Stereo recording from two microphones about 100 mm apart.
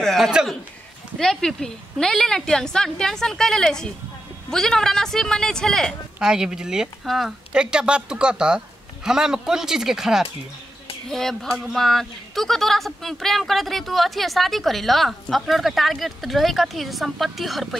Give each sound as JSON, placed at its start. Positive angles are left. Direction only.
{"t": 0.0, "sound": "a sound", "side_deg": 5}
{"t": 0.3, "sound": "speech", "side_deg": -5}
{"t": 1.1, "sound": "speech", "side_deg": 5}
{"t": 6.1, "sound": "speech", "side_deg": -5}